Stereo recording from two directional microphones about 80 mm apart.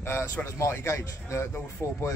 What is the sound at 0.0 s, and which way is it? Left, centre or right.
Speech, left.